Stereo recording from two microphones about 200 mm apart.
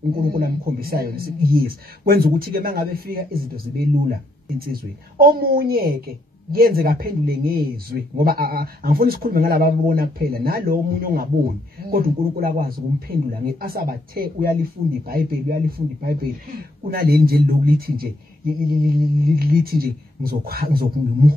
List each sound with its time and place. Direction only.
0.2 s a woman's voice: 50° right (ahead or behind)
5.2 s a woman's voice: 50° right (ahead or behind)